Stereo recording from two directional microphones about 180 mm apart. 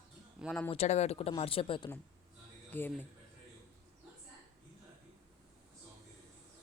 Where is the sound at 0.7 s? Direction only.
35° left (ahead or behind).